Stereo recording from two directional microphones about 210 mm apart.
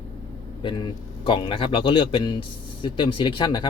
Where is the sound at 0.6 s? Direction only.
20° left (ahead or behind).